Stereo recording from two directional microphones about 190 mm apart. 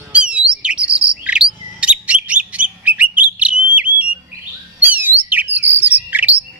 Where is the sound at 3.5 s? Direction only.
45° right (ahead or behind).